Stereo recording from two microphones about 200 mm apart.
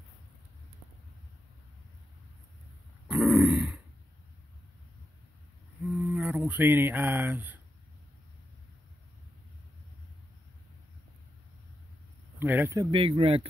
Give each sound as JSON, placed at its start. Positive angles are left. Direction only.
{"t": 3.1, "sound": "grunt", "side_deg": -5}
{"t": 6.0, "sound": "speech", "side_deg": -10}
{"t": 12.4, "sound": "speech", "side_deg": -10}
{"t": 12.9, "sound": "speech", "side_deg": -25}